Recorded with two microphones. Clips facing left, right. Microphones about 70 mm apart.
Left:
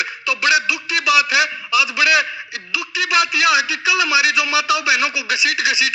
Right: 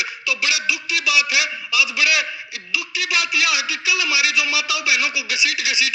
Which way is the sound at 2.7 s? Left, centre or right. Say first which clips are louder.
Left 5 dB; left.